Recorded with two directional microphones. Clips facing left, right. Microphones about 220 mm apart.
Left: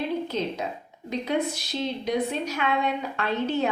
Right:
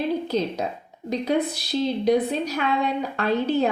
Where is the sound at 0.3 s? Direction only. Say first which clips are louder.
Right 4 dB; 35° right (ahead or behind).